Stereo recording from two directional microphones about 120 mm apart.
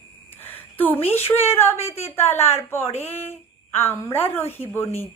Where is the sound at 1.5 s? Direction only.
20° left (ahead or behind).